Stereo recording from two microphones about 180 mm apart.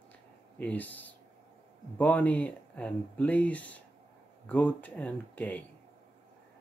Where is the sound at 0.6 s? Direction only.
10° left (ahead or behind).